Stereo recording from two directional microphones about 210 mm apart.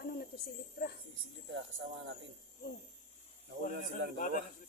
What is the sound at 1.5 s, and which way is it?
Speech, 60° right (ahead or behind).